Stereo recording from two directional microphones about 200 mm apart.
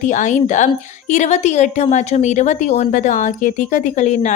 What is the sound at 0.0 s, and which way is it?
A woman's voice, 40° left (ahead or behind).